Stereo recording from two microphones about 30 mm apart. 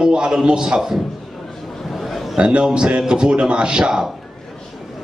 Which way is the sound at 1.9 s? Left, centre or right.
Centre.